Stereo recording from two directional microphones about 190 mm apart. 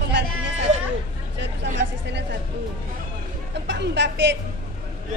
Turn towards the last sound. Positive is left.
turn(degrees=-65)  # may be behind; listen again after turning